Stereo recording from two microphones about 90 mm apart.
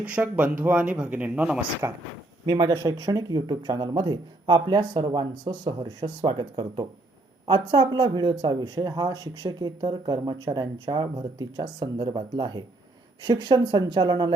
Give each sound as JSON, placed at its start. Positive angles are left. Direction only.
{"t": 0.0, "sound": "speech", "side_deg": -15}
{"t": 1.8, "sound": "speech", "side_deg": -25}
{"t": 2.5, "sound": "speech", "side_deg": -45}
{"t": 11.9, "sound": "speech", "side_deg": -60}